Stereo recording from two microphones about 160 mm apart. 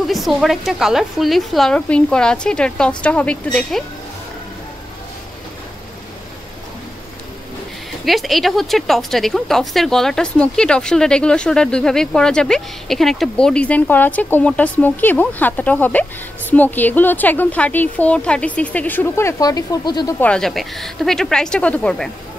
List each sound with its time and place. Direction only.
0.0 s a woman's voice: centre (ahead or behind)
8.0 s a woman's voice: centre (ahead or behind); by 20.2 s 25° left (ahead or behind)
20.2 s a woman's voice: 5° left (ahead or behind)